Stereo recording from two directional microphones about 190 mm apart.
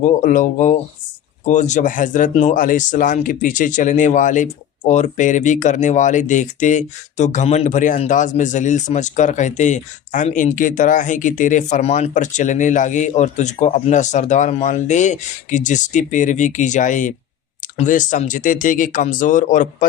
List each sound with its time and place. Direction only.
0.0 s speech: 40° left (ahead or behind)